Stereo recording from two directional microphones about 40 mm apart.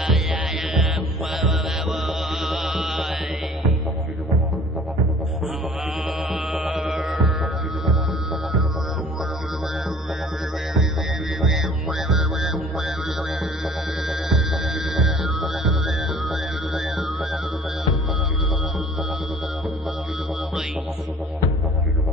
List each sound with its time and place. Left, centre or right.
1.3 s music: centre
2.8 s mantra: centre
6.8 s music: right
11.4 s music: centre
14.0 s music: centre
16.3 s music: centre